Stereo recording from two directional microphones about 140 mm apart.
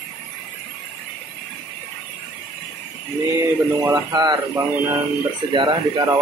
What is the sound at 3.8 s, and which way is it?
Speech, 25° right (ahead or behind).